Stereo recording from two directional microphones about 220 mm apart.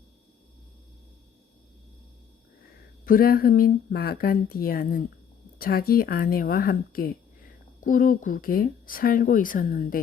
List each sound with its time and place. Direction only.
3.0 s speech: 40° left (ahead or behind)